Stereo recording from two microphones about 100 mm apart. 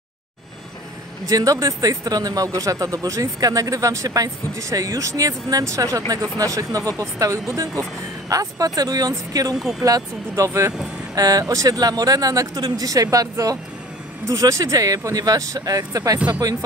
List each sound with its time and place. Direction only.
1.2 s speech: 35° right (ahead or behind)
9.6 s speech: centre (ahead or behind)
9.8 s speech: 35° right (ahead or behind)